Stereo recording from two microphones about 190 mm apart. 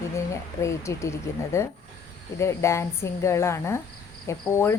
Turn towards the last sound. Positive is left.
turn(degrees=15)  # may be behind; listen again after turning